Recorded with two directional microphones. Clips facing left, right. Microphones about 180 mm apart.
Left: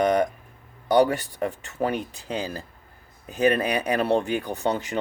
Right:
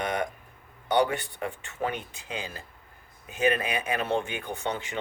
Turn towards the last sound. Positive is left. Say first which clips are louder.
# left 6 dB
turn(degrees=40)  # may be behind; listen again after turning